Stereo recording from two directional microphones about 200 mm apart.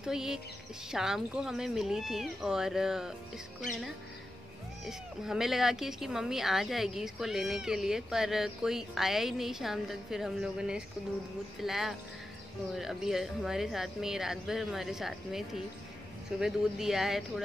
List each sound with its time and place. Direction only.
0.0 s speech: 5° right (ahead or behind)
4.8 s speech: centre (ahead or behind)